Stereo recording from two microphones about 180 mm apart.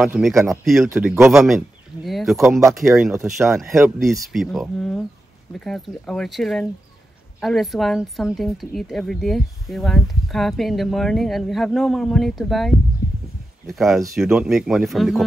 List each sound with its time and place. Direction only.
0.0 s speech: centre (ahead or behind)
3.3 s speech: centre (ahead or behind)